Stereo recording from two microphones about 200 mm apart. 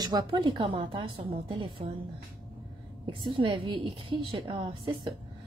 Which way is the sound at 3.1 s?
25° right (ahead or behind).